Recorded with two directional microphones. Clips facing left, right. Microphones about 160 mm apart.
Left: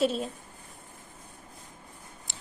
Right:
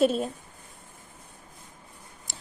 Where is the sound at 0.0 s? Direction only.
50° right (ahead or behind).